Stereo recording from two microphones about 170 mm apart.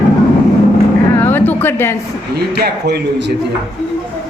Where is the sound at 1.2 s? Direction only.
10° left (ahead or behind).